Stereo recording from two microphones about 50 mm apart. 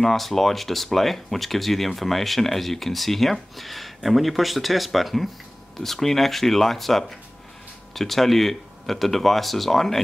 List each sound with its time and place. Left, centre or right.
0.0 s speech: centre